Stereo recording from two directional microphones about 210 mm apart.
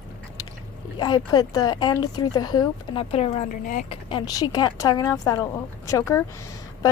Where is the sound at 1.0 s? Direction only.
20° left (ahead or behind); by 3.8 s 40° left (ahead or behind).